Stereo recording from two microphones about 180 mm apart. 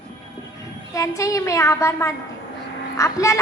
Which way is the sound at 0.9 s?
15° left (ahead or behind).